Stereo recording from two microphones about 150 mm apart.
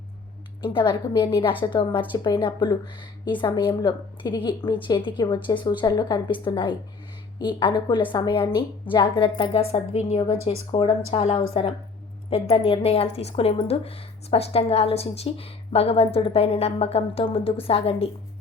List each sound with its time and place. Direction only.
0.6 s a woman's voice: 35° left (ahead or behind)